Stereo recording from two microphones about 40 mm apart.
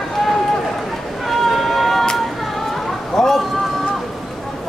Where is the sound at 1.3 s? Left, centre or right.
Centre.